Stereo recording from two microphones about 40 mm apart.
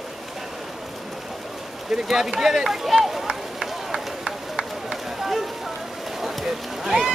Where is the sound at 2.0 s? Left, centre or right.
Centre.